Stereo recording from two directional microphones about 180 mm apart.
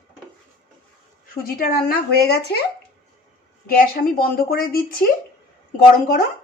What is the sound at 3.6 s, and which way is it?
A woman's voice, 55° left (ahead or behind).